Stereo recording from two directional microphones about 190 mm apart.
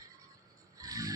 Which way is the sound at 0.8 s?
20° right (ahead or behind).